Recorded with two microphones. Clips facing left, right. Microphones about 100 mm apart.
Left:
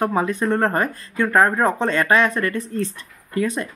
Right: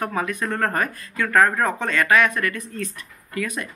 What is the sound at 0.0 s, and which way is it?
Speech, 30° left (ahead or behind).